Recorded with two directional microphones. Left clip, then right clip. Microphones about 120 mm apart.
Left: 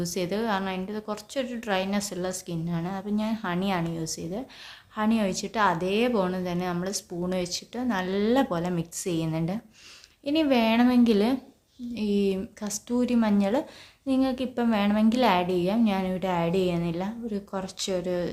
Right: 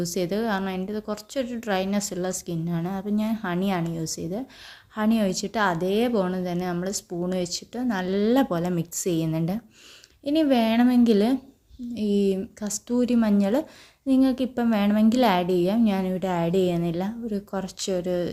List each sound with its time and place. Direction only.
0.0 s a woman's voice: 40° right (ahead or behind)